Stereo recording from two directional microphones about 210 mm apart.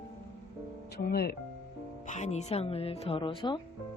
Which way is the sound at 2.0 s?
35° left (ahead or behind).